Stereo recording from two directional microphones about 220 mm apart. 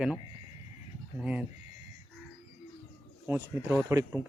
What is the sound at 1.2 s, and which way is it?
Speech, 5° right (ahead or behind).